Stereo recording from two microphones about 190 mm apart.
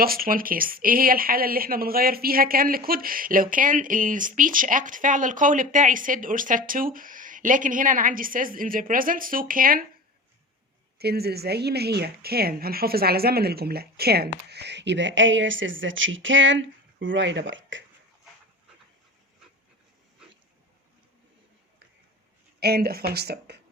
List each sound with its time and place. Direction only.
0.0 s speech: 50° right (ahead or behind)
10.9 s a woman's voice: 55° right (ahead or behind); by 17.8 s 75° right (ahead or behind)
22.6 s a woman's voice: 55° right (ahead or behind)